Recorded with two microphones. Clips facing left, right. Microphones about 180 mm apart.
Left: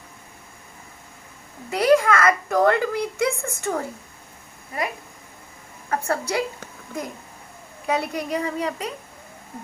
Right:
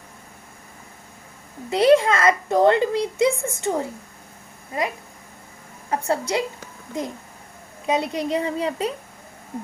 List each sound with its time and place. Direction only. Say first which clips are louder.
1.7 s a child's voice: right 2 dB; 25° right (ahead or behind)
5.9 s a child's voice: right 2 dB; 20° right (ahead or behind)
7.9 s a child's voice: right 2 dB; 20° right (ahead or behind)